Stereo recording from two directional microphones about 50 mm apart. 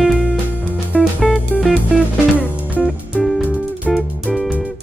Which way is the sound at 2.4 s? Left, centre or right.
Right.